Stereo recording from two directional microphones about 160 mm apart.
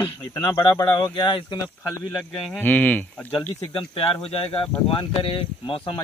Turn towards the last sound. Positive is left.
turn(degrees=30)  # may be behind; listen again after turning